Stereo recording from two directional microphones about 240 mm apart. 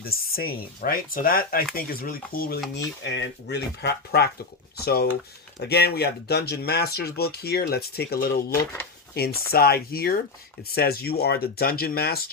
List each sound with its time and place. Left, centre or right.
0.0 s speech: left